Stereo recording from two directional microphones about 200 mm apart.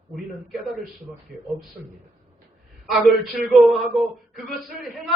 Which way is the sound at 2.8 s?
Centre (ahead or behind).